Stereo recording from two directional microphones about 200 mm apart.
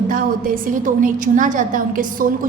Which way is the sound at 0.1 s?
45° right (ahead or behind).